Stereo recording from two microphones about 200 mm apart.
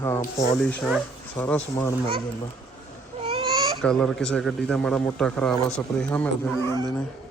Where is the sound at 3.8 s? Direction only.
5° left (ahead or behind).